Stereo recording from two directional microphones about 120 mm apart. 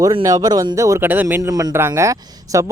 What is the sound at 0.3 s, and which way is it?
Speech, 30° right (ahead or behind).